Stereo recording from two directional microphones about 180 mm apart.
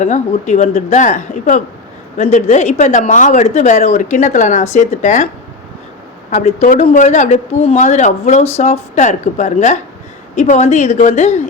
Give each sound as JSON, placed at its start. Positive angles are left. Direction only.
{"t": 0.0, "sound": "speech", "side_deg": 40}
{"t": 6.3, "sound": "speech", "side_deg": 40}